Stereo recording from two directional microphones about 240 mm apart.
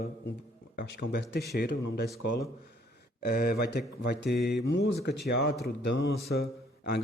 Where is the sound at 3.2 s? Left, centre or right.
Left.